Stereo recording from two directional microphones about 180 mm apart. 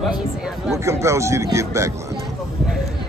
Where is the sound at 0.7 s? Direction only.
15° right (ahead or behind).